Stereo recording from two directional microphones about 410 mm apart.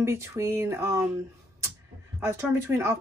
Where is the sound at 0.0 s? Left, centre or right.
Centre.